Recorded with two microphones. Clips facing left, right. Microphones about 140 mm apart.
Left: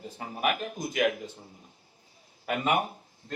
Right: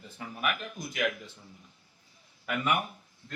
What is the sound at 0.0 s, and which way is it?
Speech, 35° left (ahead or behind).